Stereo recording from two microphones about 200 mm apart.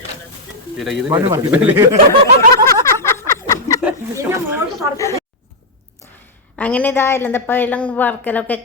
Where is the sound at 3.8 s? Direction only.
15° right (ahead or behind).